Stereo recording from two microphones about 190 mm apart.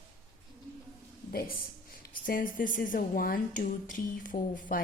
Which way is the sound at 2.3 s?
45° left (ahead or behind).